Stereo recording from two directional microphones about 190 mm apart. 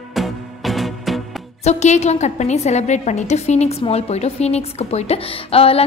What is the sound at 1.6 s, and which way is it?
A woman's voice, 35° left (ahead or behind).